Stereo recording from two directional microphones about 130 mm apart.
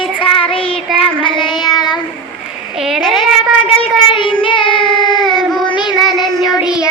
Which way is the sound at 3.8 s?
40° left (ahead or behind).